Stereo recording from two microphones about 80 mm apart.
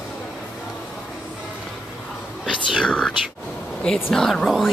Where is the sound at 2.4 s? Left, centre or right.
Centre.